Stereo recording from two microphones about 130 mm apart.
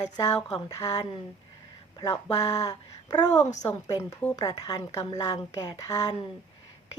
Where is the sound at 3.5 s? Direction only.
65° left (ahead or behind).